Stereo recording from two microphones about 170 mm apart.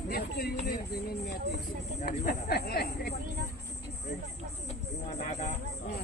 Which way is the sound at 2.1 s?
65° left (ahead or behind).